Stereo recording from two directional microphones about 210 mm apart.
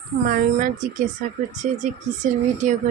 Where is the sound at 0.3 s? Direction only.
40° right (ahead or behind).